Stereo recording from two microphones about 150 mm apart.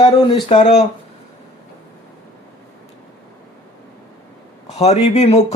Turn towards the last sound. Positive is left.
turn(degrees=45)  # may be behind; listen again after turning